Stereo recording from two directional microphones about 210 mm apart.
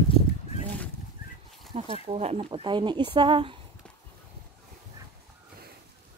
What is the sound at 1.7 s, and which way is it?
Speech, 30° right (ahead or behind).